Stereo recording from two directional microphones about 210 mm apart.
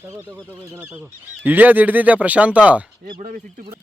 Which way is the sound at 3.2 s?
40° right (ahead or behind).